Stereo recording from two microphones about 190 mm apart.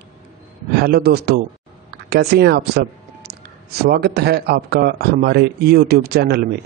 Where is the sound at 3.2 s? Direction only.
55° right (ahead or behind).